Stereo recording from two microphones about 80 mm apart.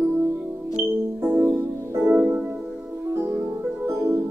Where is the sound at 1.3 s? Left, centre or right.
Right.